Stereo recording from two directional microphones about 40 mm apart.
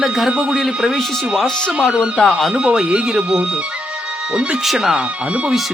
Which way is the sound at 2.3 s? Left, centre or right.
Centre.